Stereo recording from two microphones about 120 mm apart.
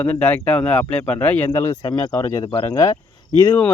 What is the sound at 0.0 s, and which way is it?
Speech, 10° left (ahead or behind).